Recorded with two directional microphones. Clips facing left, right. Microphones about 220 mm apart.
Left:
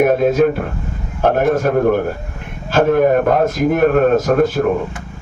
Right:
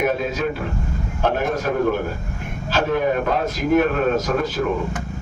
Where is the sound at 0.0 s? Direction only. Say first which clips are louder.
Left 9 dB; 55° left (ahead or behind).